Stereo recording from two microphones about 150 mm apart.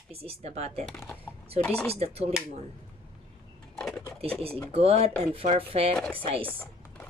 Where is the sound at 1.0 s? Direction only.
15° left (ahead or behind).